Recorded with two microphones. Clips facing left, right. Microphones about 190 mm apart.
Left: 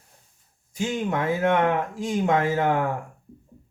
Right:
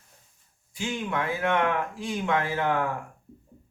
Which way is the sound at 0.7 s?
45° left (ahead or behind).